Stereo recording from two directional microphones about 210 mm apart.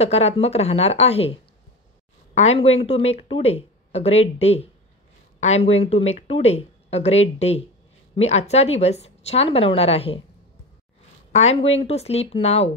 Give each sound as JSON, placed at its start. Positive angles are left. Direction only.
{"t": 0.0, "sound": "speech", "side_deg": 30}
{"t": 11.3, "sound": "speech", "side_deg": 30}